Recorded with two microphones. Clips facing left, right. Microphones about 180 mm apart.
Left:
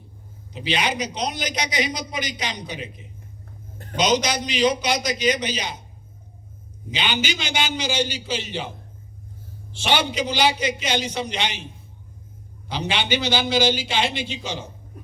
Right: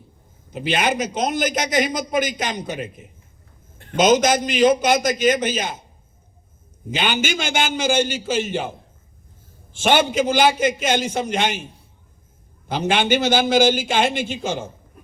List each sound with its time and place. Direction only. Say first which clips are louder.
0.5 s a man's voice: right 4 dB; 50° right (ahead or behind)
6.9 s a man's voice: right 4 dB; 50° right (ahead or behind)
9.7 s a man's voice: right 5 dB; 50° right (ahead or behind)
12.6 s a man's voice: right 6 dB; 50° right (ahead or behind)